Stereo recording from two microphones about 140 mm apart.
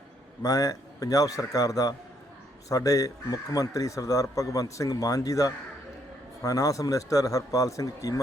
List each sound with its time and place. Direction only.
0.4 s speech: 25° left (ahead or behind)